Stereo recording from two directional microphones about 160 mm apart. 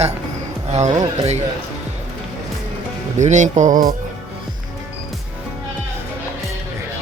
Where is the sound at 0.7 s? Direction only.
45° right (ahead or behind).